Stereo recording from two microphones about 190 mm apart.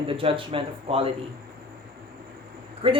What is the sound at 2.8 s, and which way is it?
Speech, 30° right (ahead or behind).